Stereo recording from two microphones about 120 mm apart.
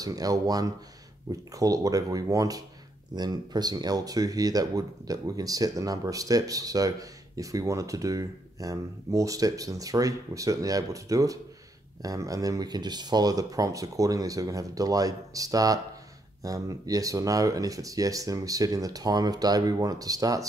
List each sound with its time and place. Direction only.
0.0 s speech: 30° right (ahead or behind)